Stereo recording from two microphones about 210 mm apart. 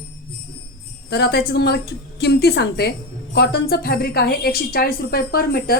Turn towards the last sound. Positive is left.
turn(degrees=45)  # may be behind; listen again after turning